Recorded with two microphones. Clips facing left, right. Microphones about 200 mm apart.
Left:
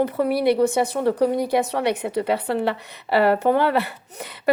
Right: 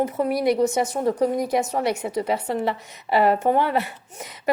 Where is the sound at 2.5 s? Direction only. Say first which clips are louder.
Left 2 dB; 75° left (ahead or behind).